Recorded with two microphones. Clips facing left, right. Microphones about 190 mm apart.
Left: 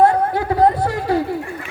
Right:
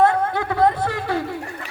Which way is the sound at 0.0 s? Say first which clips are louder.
Left 3 dB; 35° left (ahead or behind).